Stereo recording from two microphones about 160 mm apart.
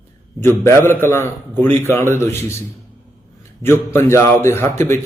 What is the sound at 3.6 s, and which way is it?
Speech, 15° left (ahead or behind).